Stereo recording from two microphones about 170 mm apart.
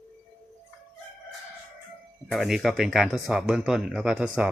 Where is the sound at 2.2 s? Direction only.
Centre (ahead or behind).